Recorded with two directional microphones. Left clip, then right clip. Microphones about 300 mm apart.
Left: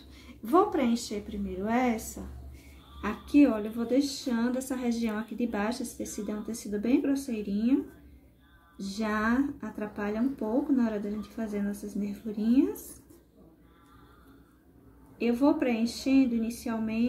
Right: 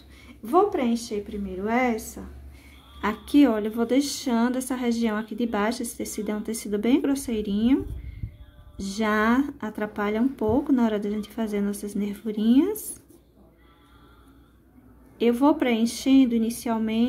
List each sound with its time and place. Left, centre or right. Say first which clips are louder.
0.3 s a woman's voice: right 3 dB; centre
15.1 s speech: right 5 dB; centre